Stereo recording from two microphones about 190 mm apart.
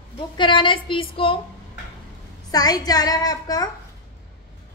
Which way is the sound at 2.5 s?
20° left (ahead or behind).